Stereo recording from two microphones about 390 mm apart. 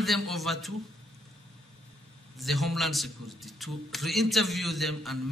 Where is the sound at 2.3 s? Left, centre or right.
Centre.